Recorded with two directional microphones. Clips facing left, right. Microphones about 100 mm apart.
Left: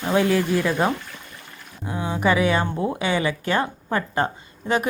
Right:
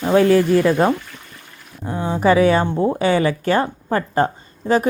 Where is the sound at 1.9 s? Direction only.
35° right (ahead or behind).